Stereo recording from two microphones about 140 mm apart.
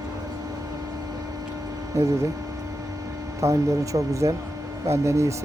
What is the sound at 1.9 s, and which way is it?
Speech, 20° right (ahead or behind).